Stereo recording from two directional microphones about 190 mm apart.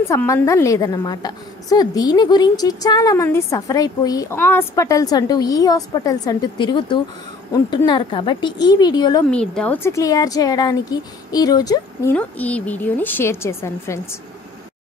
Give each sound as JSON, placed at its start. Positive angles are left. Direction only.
{"t": 0.1, "sound": "a woman's voice", "side_deg": 15}
{"t": 9.3, "sound": "speech", "side_deg": 5}